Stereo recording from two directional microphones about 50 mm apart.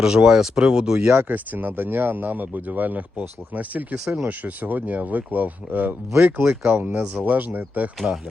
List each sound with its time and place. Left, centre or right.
0.0 s speech: centre
1.1 s speech: right
3.9 s speech: centre
4.3 s speech: right
6.7 s speech: right
7.0 s speech: right